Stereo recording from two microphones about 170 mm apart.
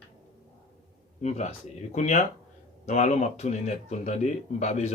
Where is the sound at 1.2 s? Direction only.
40° left (ahead or behind).